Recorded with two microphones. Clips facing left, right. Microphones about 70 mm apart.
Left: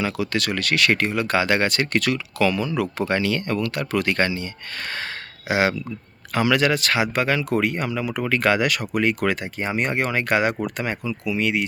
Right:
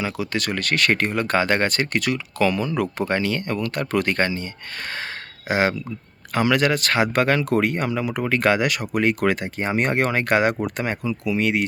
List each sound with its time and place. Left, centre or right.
0.0 s speech: right
1.9 s speech: right
2.4 s speech: right
9.0 s speech: right